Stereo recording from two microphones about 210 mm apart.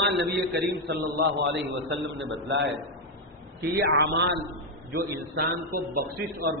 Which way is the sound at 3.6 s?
50° right (ahead or behind).